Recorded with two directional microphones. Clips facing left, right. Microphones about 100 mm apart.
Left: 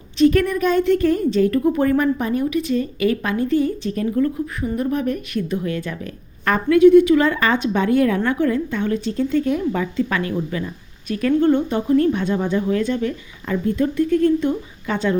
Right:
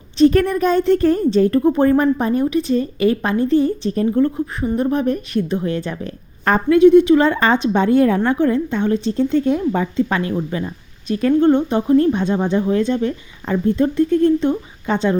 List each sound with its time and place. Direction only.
0.2 s a woman's voice: 35° right (ahead or behind)